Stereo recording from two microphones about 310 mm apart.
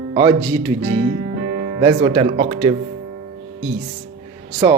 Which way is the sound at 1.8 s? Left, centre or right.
Centre.